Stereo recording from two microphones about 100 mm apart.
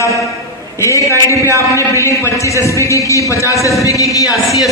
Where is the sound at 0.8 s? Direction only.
30° left (ahead or behind).